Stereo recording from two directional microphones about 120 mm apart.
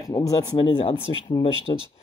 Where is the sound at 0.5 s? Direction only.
50° left (ahead or behind).